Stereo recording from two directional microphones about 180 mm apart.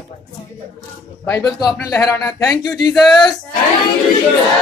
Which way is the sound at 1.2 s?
15° left (ahead or behind).